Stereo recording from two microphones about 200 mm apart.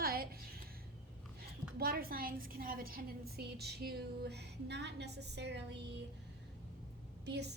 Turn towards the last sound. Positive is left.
turn(degrees=-55)  # may be behind; listen again after turning